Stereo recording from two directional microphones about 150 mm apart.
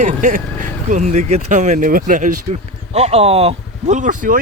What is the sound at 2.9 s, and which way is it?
Speech, 45° right (ahead or behind).